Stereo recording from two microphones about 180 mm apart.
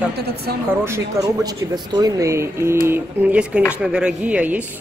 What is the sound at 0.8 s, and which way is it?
A woman's voice, 15° right (ahead or behind).